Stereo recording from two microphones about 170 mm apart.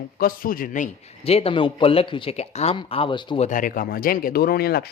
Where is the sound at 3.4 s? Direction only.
50° left (ahead or behind); by 4.9 s 65° left (ahead or behind).